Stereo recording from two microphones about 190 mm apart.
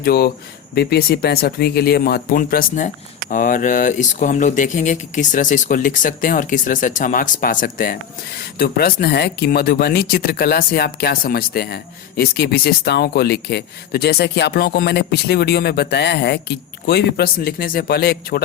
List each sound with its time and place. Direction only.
0.0 s speech: 55° left (ahead or behind)